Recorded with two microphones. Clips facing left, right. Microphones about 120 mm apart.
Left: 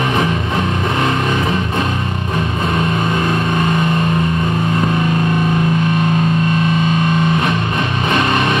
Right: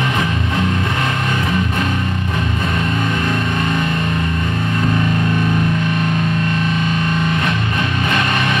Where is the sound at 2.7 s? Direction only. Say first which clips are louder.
Left 4 dB; 25° left (ahead or behind).